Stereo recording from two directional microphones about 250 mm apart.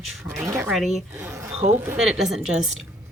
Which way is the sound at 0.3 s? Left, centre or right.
Centre.